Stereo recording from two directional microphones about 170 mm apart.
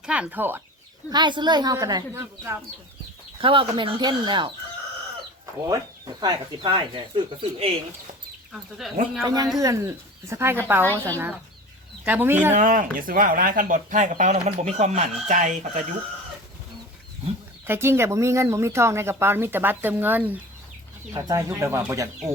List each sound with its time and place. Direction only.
0.0 s speech: 5° right (ahead or behind)
1.1 s speech: 25° right (ahead or behind)
3.4 s speech: 30° right (ahead or behind)
5.6 s speech: 20° right (ahead or behind)
8.5 s speech: centre (ahead or behind)
9.2 s speech: 20° right (ahead or behind)
12.0 s speech: 10° right (ahead or behind)
12.5 s speech: 50° right (ahead or behind)
17.7 s speech: 15° right (ahead or behind)